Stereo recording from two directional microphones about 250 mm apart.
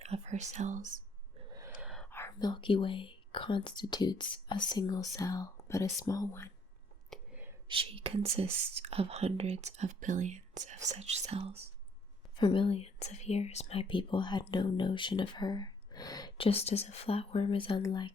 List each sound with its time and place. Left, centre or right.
0.0 s speech: right
1.5 s whispering: centre
3.8 s speech: centre
7.1 s whispering: centre
7.7 s speech: right
12.4 s speech: centre